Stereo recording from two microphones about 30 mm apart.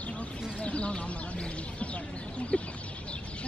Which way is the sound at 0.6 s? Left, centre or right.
Left.